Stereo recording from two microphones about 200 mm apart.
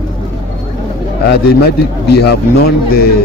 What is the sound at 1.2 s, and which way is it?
Speech, 55° left (ahead or behind).